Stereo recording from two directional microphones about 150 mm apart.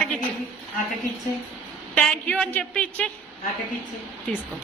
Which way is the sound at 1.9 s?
5° left (ahead or behind).